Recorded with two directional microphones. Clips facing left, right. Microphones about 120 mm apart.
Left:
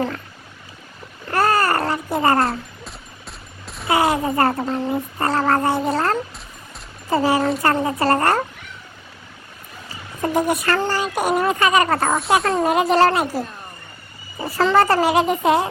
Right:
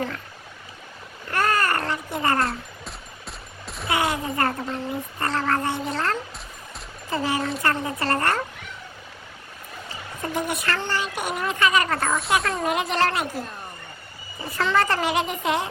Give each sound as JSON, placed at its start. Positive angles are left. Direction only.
{"t": 1.3, "sound": "babbling", "side_deg": 35}
{"t": 2.5, "sound": "music", "side_deg": 0}
{"t": 3.8, "sound": "a child's voice", "side_deg": 35}
{"t": 10.3, "sound": "a child's voice", "side_deg": 40}
{"t": 14.4, "sound": "a child's voice", "side_deg": 35}